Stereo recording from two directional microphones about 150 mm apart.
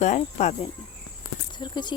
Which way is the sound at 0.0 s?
50° left (ahead or behind).